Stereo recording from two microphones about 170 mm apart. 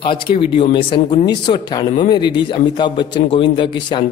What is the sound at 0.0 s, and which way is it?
Speech, 30° left (ahead or behind).